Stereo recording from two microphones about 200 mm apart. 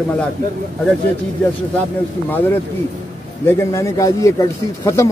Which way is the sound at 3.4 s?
15° left (ahead or behind).